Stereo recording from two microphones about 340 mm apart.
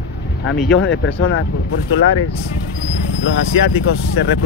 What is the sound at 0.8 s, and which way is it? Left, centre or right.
Speech, left.